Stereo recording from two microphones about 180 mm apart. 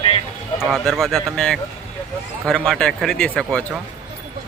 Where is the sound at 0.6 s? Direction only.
Centre (ahead or behind).